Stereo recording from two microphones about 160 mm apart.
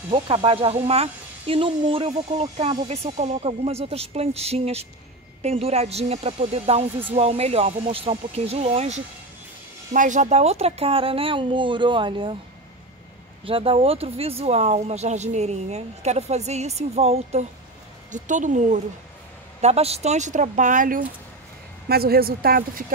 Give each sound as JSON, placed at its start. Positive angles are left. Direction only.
{"t": 0.1, "sound": "speech", "side_deg": -35}
{"t": 13.5, "sound": "speech", "side_deg": -35}
{"t": 21.8, "sound": "speech", "side_deg": -75}